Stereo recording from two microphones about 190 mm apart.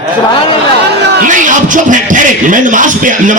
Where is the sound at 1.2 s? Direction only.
40° right (ahead or behind).